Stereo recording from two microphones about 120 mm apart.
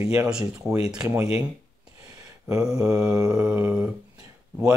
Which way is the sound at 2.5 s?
25° right (ahead or behind).